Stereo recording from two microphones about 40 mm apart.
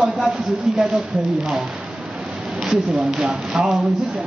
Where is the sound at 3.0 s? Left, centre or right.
Right.